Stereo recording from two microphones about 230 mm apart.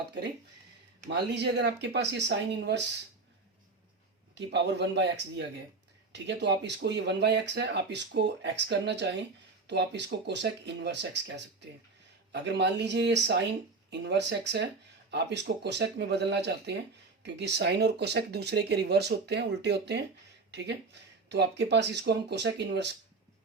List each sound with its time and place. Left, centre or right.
1.3 s speech: right
4.4 s speech: right